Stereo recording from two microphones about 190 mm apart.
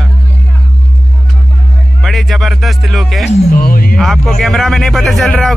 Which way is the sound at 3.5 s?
50° left (ahead or behind).